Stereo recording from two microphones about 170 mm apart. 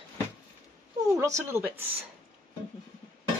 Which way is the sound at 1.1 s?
15° right (ahead or behind).